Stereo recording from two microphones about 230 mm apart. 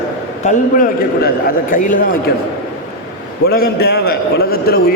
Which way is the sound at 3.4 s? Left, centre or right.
Left.